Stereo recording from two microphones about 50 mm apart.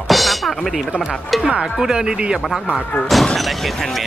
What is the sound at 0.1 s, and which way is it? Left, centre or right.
Music, centre.